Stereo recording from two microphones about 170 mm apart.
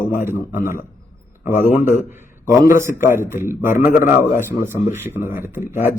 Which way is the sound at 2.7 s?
15° right (ahead or behind).